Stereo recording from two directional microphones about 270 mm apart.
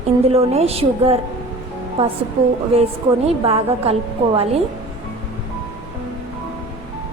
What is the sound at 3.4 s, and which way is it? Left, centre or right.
A woman's voice, right.